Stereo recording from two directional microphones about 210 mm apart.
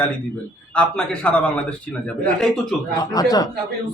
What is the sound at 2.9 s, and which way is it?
Speech, 20° left (ahead or behind).